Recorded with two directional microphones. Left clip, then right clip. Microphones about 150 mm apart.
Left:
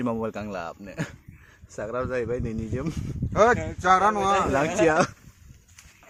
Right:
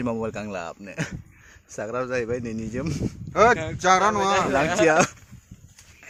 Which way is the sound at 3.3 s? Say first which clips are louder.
Right 2 dB; 40° right (ahead or behind).